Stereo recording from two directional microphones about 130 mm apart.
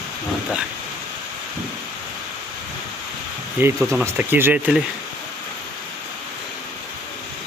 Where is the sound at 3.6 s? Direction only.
15° right (ahead or behind).